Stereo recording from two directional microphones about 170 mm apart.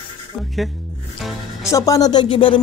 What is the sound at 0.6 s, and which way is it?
Speech, centre (ahead or behind).